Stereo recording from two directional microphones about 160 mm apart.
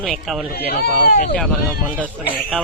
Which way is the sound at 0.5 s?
70° left (ahead or behind).